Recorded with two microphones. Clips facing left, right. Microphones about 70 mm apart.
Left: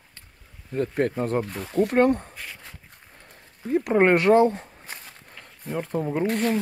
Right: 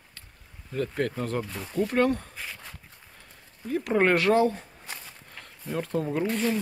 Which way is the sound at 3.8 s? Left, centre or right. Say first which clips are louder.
Left 4 dB; left.